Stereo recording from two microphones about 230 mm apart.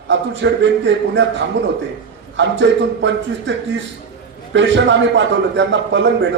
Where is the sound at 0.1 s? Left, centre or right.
Right.